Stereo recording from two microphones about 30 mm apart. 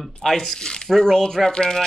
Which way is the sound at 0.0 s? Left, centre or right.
Centre.